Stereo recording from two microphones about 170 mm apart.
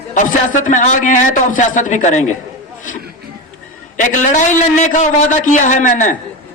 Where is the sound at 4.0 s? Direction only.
50° left (ahead or behind).